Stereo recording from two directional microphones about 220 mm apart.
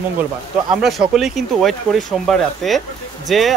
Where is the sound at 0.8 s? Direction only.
Centre (ahead or behind).